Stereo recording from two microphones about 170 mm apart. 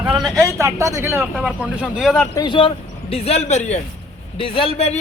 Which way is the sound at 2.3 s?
30° left (ahead or behind).